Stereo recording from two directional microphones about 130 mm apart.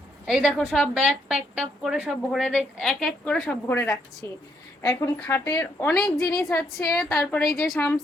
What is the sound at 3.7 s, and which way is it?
Speech, 15° left (ahead or behind).